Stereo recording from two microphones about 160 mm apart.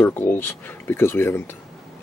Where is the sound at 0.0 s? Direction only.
15° left (ahead or behind).